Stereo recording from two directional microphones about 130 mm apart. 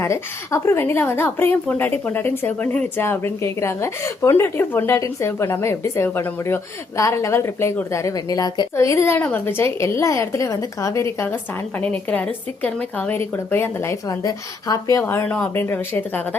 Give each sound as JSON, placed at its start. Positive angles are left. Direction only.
{"t": 0.0, "sound": "a woman's voice", "side_deg": 20}
{"t": 11.8, "sound": "a woman's voice", "side_deg": 10}
{"t": 15.0, "sound": "a woman's voice", "side_deg": 15}